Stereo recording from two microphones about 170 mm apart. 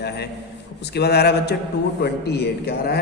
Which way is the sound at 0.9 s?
70° left (ahead or behind).